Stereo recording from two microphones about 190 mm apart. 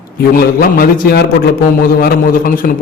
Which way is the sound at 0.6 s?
55° left (ahead or behind).